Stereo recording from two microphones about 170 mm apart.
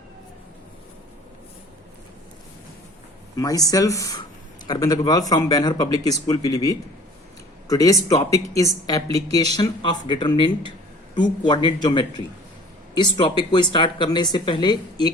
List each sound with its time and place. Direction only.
3.3 s speech: 20° left (ahead or behind)